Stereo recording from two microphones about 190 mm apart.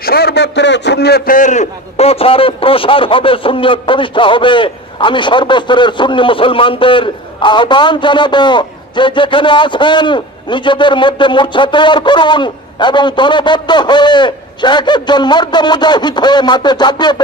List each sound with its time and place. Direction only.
0.0 s a man's voice: 55° left (ahead or behind); by 17.2 s 20° left (ahead or behind)